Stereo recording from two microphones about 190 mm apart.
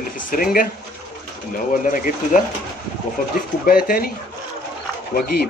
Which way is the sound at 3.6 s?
50° left (ahead or behind).